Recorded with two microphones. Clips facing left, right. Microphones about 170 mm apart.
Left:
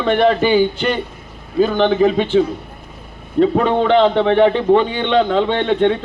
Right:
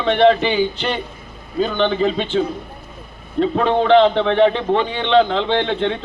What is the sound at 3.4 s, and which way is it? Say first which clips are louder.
A man's voice: left 3 dB; 40° left (ahead or behind).